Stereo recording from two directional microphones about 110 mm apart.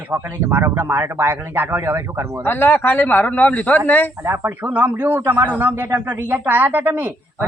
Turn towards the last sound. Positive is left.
turn(degrees=-20)  # may be behind; listen again after turning